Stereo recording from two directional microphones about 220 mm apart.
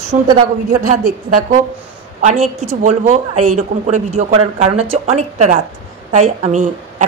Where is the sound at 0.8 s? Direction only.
35° right (ahead or behind).